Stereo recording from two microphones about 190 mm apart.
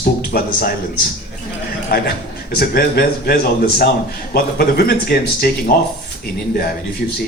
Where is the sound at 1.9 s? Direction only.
55° left (ahead or behind).